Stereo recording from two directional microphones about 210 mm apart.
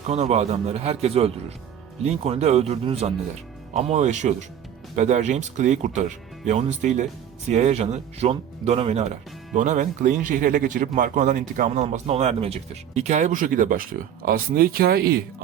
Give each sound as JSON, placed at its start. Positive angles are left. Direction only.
{"t": 0.1, "sound": "a man's voice", "side_deg": -30}